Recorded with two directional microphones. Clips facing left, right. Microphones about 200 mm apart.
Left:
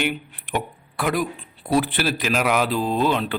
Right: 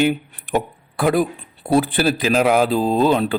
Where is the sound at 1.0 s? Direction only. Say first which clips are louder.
Right 6 dB; 30° right (ahead or behind).